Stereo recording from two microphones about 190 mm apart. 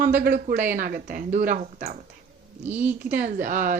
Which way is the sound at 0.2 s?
45° right (ahead or behind).